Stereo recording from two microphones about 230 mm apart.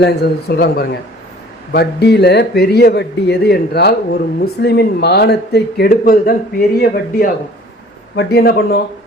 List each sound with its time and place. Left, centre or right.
0.0 s speech: left